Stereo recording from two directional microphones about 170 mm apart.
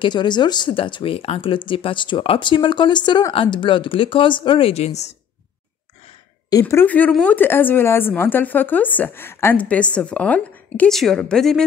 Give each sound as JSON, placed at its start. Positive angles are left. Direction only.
{"t": 0.0, "sound": "speech", "side_deg": 25}
{"t": 6.6, "sound": "speech", "side_deg": 10}